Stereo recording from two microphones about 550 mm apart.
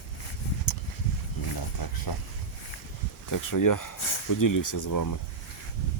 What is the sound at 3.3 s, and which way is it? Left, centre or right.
Speech, left.